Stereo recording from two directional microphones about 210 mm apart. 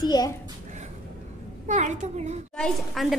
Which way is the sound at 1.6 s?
35° right (ahead or behind).